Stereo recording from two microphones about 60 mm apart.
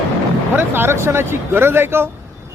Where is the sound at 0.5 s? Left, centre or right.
Right.